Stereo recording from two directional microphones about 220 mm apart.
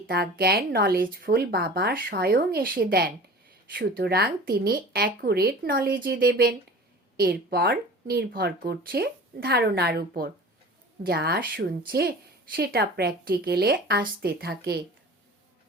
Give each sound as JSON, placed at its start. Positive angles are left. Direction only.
{"t": 0.1, "sound": "speech", "side_deg": -45}